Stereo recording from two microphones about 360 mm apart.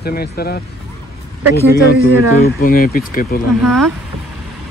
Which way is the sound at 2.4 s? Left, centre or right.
Left.